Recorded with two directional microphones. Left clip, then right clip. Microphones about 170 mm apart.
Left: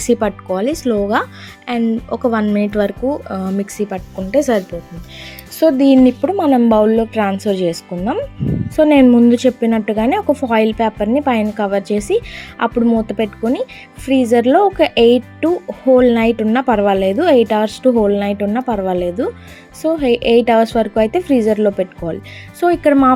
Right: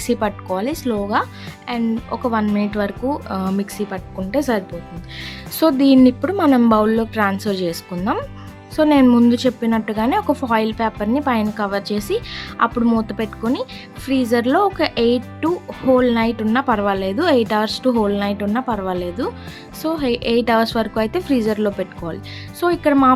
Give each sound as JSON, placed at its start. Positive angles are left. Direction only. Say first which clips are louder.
{"t": 0.0, "sound": "a woman's voice", "louder": "left 5 dB", "side_deg": 10}
{"t": 5.5, "sound": "a woman's voice", "louder": "left 3 dB", "side_deg": 0}
{"t": 6.3, "sound": "a woman's voice", "louder": "left 3 dB", "side_deg": -10}